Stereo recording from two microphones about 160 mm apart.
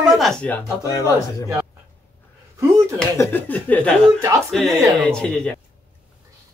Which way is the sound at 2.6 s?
20° right (ahead or behind).